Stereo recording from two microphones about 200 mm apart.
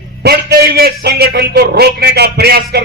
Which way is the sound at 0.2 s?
55° right (ahead or behind).